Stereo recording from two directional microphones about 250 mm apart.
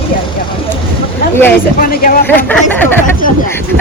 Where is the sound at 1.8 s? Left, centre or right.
Left.